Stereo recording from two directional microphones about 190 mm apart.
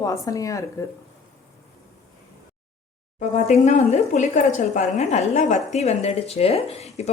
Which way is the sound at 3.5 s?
35° left (ahead or behind).